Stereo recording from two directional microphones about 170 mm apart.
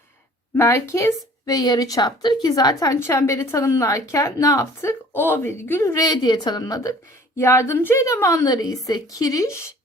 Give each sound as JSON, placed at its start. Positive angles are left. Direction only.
{"t": 0.5, "sound": "a woman's voice", "side_deg": 15}